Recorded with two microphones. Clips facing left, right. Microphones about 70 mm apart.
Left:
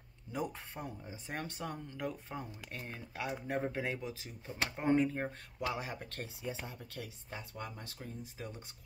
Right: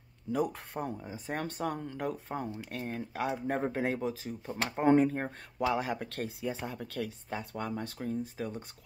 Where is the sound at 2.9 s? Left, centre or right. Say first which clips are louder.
Right 7 dB; right.